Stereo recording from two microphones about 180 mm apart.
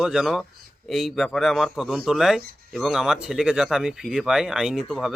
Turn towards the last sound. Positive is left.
turn(degrees=0)  # may be behind; listen again after turning